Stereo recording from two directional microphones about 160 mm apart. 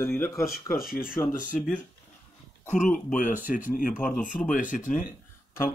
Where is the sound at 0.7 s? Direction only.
65° left (ahead or behind).